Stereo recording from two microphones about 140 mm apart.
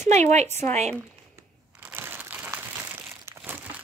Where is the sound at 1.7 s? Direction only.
15° right (ahead or behind).